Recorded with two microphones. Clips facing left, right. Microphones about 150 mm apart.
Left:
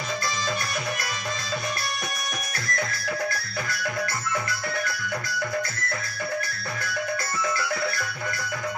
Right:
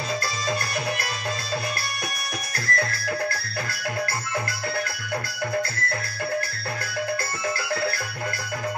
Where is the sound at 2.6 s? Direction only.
65° right (ahead or behind).